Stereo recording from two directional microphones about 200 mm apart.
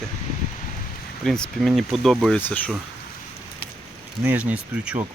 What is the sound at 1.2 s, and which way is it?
Speech, centre (ahead or behind).